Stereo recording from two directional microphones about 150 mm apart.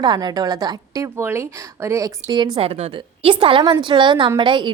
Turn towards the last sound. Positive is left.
turn(degrees=-30)  # may be behind; listen again after turning